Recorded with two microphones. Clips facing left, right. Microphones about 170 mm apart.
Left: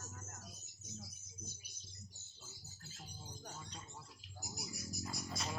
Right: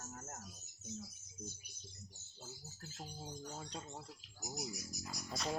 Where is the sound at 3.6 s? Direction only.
70° right (ahead or behind).